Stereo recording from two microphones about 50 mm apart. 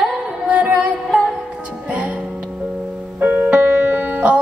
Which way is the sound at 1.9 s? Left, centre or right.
Right.